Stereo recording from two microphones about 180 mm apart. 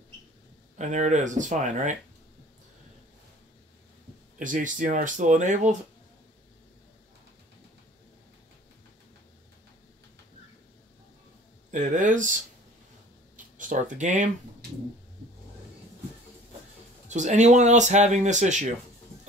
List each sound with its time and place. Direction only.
0.7 s speech: 40° right (ahead or behind)
4.4 s speech: 45° right (ahead or behind)
11.7 s speech: 45° right (ahead or behind)
13.6 s speech: 45° right (ahead or behind)
17.1 s speech: 40° right (ahead or behind)